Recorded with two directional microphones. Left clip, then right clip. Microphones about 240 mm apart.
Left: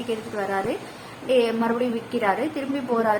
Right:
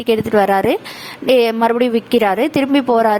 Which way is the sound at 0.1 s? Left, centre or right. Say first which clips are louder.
Right 14 dB; right.